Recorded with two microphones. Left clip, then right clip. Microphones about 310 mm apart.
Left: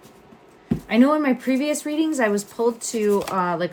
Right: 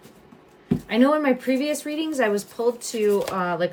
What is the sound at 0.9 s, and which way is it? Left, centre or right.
Speech, centre.